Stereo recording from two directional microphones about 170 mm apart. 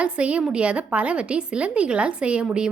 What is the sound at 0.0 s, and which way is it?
A woman's voice, 5° right (ahead or behind).